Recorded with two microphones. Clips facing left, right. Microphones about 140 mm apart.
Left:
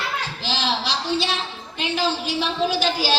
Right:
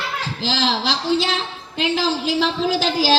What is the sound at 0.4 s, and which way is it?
A woman's voice, 90° right.